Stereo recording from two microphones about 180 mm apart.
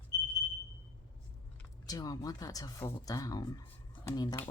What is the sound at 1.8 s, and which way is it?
Speech, 20° left (ahead or behind).